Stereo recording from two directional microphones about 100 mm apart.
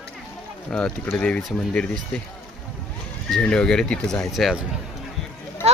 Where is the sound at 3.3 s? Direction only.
5° left (ahead or behind).